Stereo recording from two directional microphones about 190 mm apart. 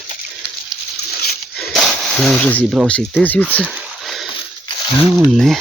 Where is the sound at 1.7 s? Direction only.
Centre (ahead or behind).